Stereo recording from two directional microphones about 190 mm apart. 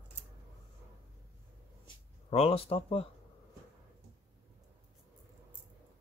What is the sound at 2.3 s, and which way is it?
Speech, 30° left (ahead or behind).